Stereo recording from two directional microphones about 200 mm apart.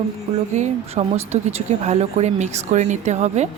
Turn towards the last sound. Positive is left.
turn(degrees=-35)  # may be behind; listen again after turning